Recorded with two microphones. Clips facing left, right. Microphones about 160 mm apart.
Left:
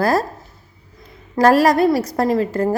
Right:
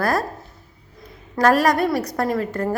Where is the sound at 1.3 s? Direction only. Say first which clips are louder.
Left 4 dB; 30° left (ahead or behind).